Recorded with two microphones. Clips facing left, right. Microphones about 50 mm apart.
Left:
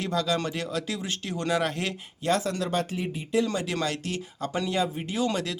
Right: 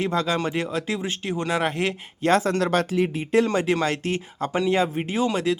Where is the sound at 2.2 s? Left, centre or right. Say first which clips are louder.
Right 6 dB; right.